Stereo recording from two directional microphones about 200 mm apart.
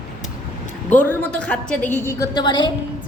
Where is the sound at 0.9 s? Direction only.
10° left (ahead or behind).